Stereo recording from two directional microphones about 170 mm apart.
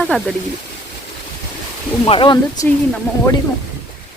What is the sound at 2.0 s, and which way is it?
Speech, 30° left (ahead or behind).